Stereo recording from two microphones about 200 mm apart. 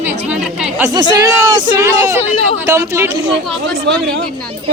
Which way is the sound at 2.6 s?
15° right (ahead or behind).